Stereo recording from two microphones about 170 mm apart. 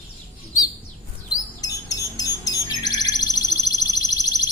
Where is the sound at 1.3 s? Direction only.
20° left (ahead or behind).